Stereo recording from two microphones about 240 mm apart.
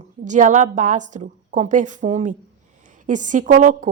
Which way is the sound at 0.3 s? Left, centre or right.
Right.